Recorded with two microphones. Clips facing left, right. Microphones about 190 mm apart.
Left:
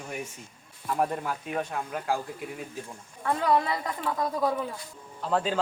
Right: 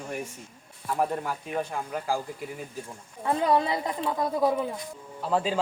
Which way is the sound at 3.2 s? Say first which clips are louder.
Right 1 dB; 20° right (ahead or behind).